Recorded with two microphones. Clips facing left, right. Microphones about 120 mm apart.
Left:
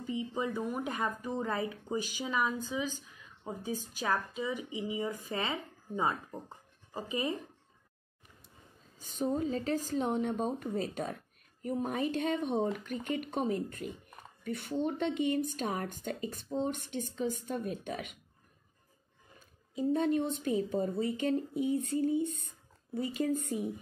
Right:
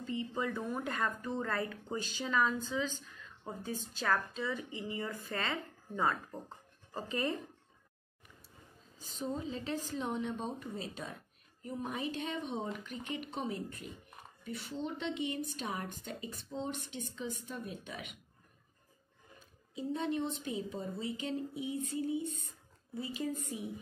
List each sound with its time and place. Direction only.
0.0 s speech: 15° left (ahead or behind)
9.3 s speech: 45° left (ahead or behind)
19.7 s speech: 50° left (ahead or behind)